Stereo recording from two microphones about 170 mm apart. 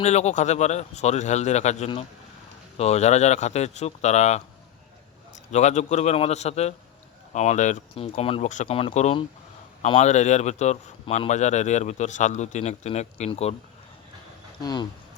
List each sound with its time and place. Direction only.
0.0 s a man's voice: 40° left (ahead or behind)
5.5 s a man's voice: 45° left (ahead or behind)
14.6 s speech: 25° left (ahead or behind)